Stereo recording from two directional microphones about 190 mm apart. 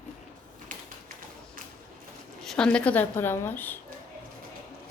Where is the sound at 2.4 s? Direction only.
5° left (ahead or behind).